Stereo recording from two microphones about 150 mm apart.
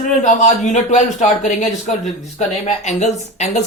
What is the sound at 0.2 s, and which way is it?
Speech, 55° left (ahead or behind).